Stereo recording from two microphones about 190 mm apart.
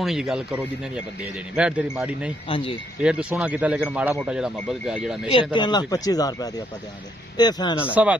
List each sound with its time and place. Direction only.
0.0 s speech: centre (ahead or behind)
2.4 s speech: 30° left (ahead or behind)
3.0 s speech: 5° right (ahead or behind)
5.3 s speech: 25° left (ahead or behind)
7.9 s speech: 5° right (ahead or behind)